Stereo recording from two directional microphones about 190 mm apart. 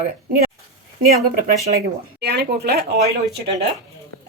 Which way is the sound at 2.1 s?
60° right (ahead or behind).